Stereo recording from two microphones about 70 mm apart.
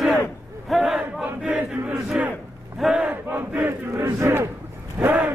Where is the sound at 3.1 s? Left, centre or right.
Right.